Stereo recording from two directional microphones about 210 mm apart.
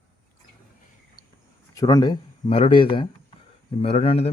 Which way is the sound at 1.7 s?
20° left (ahead or behind).